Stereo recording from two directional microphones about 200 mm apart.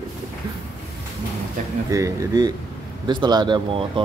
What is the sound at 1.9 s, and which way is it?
Speech, 15° right (ahead or behind).